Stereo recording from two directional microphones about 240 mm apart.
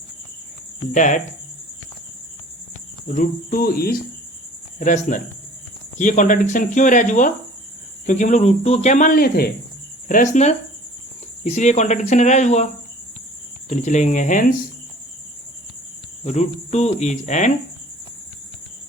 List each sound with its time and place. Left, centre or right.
0.9 s speech: left
3.1 s speech: left
13.7 s speech: left
16.2 s speech: left